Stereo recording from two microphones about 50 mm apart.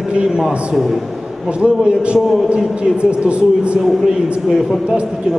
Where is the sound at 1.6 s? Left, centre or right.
Right.